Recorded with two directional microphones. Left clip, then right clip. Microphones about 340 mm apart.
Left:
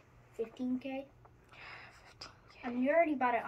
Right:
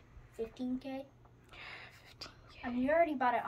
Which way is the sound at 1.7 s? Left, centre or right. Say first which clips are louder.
Even; centre.